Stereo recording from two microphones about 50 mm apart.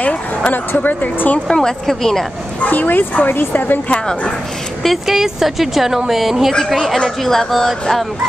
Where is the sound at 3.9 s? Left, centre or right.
Left.